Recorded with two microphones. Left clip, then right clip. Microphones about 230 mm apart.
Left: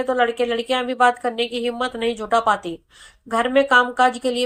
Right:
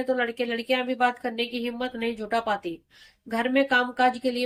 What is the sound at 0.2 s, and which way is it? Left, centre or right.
A woman's voice, centre.